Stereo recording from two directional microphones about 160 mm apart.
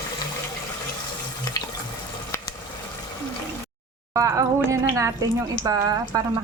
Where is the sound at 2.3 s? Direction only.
15° left (ahead or behind).